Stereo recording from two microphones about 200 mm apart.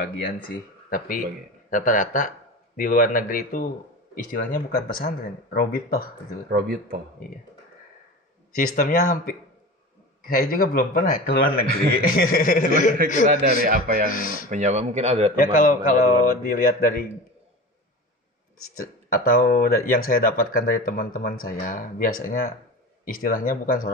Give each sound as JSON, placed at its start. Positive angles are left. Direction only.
{"t": 0.0, "sound": "speech", "side_deg": 50}
{"t": 6.5, "sound": "a man's voice", "side_deg": -45}
{"t": 8.5, "sound": "speech", "side_deg": 40}
{"t": 13.4, "sound": "a man's voice", "side_deg": -50}
{"t": 14.1, "sound": "speech", "side_deg": 45}
{"t": 14.5, "sound": "a man's voice", "side_deg": -35}
{"t": 15.3, "sound": "speech", "side_deg": 45}
{"t": 19.0, "sound": "speech", "side_deg": 45}